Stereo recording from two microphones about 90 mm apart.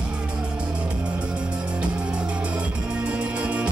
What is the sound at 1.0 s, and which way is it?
Music, 10° right (ahead or behind).